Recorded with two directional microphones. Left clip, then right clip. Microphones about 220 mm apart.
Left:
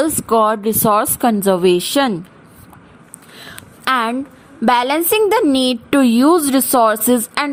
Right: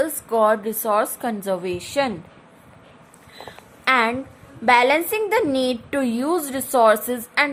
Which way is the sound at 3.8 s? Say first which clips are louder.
Left 2 dB; 35° left (ahead or behind).